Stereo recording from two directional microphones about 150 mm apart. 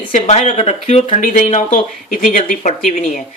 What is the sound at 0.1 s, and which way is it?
Speech, 55° left (ahead or behind).